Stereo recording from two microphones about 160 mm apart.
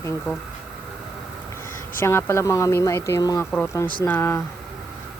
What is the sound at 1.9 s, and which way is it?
Speech, 15° left (ahead or behind).